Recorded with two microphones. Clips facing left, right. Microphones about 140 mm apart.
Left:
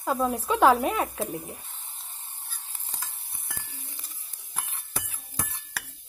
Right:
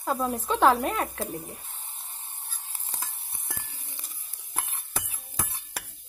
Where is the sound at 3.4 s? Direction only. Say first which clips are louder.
Even; 25° right (ahead or behind).